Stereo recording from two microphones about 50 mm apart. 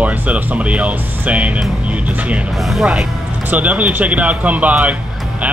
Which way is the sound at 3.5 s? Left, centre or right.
Right.